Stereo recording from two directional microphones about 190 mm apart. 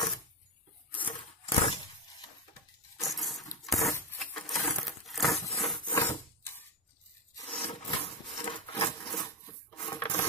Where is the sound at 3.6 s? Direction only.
Centre (ahead or behind).